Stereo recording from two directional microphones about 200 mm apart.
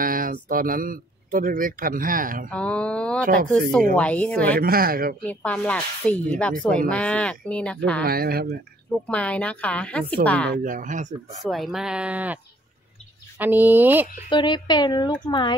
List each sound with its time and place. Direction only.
0.0 s speech: 45° right (ahead or behind)
2.5 s mantra: 5° left (ahead or behind)
3.9 s speech: 5° left (ahead or behind)
4.6 s speech: 45° right (ahead or behind)
5.2 s speech: 5° left (ahead or behind)
8.0 s speech: 50° right (ahead or behind)
9.0 s speech: 5° left (ahead or behind)
10.6 s speech: 40° right (ahead or behind)
11.4 s speech: centre (ahead or behind)
13.4 s speech: 10° right (ahead or behind)
14.3 s speech: 20° left (ahead or behind)